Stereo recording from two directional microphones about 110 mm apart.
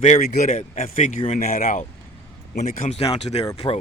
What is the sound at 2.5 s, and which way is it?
Speech, 75° left (ahead or behind).